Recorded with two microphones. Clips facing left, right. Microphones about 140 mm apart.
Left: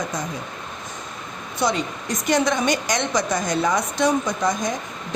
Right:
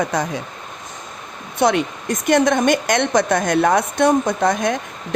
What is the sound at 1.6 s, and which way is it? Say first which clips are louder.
A woman's voice: right 6 dB; 60° right (ahead or behind).